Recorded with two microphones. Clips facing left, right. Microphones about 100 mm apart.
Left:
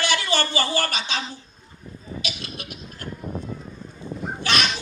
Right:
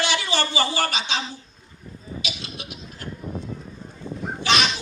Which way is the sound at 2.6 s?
50° left (ahead or behind).